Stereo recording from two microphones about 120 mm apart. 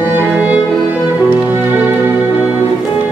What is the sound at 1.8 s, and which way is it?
Music, 15° right (ahead or behind).